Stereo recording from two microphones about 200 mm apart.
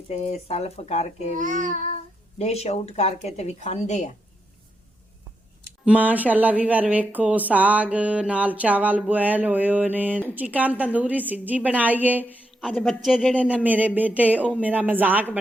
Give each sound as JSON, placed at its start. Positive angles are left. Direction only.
{"t": 0.1, "sound": "speech", "side_deg": 35}
{"t": 1.4, "sound": "child singing", "side_deg": -40}
{"t": 2.4, "sound": "speech", "side_deg": 35}
{"t": 5.8, "sound": "speech", "side_deg": -5}
{"t": 12.6, "sound": "speech", "side_deg": 5}
{"t": 13.4, "sound": "speech", "side_deg": -5}